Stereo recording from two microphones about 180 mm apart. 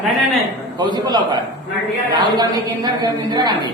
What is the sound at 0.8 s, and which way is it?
Speech, 25° right (ahead or behind).